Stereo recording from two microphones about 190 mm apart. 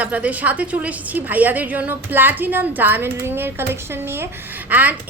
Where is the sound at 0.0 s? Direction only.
5° right (ahead or behind).